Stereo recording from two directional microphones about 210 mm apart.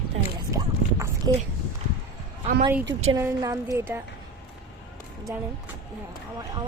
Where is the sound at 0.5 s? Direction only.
15° right (ahead or behind).